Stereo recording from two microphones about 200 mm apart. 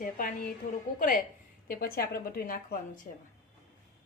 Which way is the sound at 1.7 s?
45° left (ahead or behind).